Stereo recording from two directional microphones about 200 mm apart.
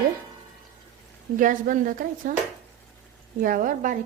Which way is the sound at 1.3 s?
40° right (ahead or behind).